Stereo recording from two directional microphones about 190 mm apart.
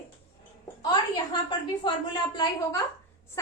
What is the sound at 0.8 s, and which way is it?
A woman's voice, 20° left (ahead or behind).